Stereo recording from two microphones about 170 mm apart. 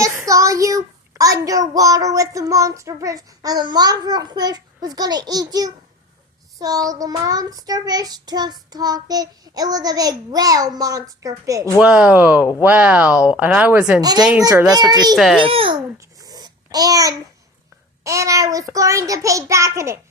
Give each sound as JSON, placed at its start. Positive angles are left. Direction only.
{"t": 0.0, "sound": "a child's voice", "side_deg": -20}
{"t": 11.8, "sound": "speech", "side_deg": -5}
{"t": 14.0, "sound": "a child's voice", "side_deg": -25}
{"t": 15.1, "sound": "a child's voice", "side_deg": 0}
{"t": 15.4, "sound": "a child's voice", "side_deg": -30}
{"t": 16.2, "sound": "babbling", "side_deg": -20}
{"t": 18.0, "sound": "a child's voice", "side_deg": -20}